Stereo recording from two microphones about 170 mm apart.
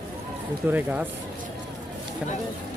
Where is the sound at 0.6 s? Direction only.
10° right (ahead or behind).